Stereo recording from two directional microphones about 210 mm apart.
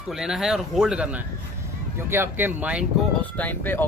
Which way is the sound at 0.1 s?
Centre (ahead or behind).